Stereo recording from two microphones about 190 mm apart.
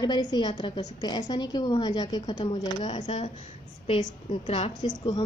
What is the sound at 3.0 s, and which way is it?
A woman's voice, 35° left (ahead or behind).